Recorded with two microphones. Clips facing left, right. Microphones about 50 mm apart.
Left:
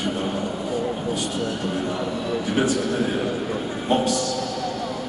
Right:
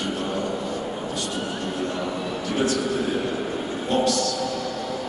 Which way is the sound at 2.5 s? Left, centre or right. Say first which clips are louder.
Left 1 dB; centre.